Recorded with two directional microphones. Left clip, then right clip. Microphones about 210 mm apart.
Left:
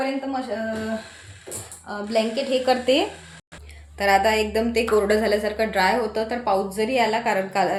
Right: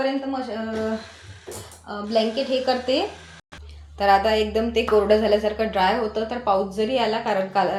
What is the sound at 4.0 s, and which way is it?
A woman's voice, 20° left (ahead or behind).